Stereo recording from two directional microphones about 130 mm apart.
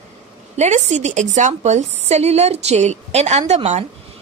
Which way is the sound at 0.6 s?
60° right (ahead or behind).